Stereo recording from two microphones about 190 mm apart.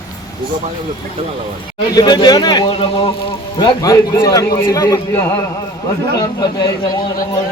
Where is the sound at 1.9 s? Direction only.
25° left (ahead or behind).